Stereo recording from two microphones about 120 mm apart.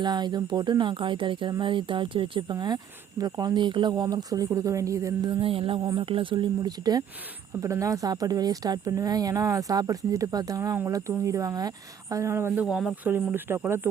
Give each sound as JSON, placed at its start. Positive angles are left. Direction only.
{"t": 0.0, "sound": "speech", "side_deg": -40}
{"t": 5.3, "sound": "a woman's voice", "side_deg": -50}
{"t": 12.6, "sound": "speech", "side_deg": -5}
{"t": 13.1, "sound": "speech", "side_deg": -15}